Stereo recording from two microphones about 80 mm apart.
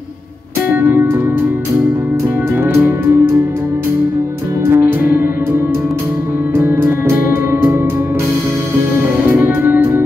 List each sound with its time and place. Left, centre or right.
0.7 s music: right
2.7 s music: right
4.6 s music: right
9.3 s music: right